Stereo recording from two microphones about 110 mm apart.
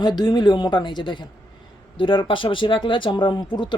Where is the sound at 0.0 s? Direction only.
40° left (ahead or behind).